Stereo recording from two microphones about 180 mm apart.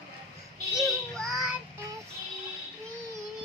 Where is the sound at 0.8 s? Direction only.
Centre (ahead or behind).